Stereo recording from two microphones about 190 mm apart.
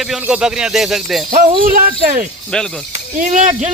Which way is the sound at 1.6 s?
50° right (ahead or behind).